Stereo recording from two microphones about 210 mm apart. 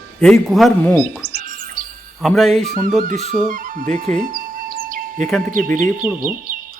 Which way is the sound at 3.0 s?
40° right (ahead or behind).